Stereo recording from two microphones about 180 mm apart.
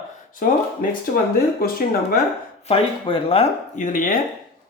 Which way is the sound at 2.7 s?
30° left (ahead or behind).